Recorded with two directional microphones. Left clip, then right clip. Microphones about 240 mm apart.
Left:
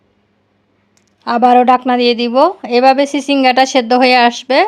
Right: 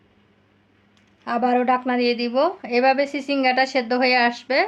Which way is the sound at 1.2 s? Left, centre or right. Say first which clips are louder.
Left 11 dB; left.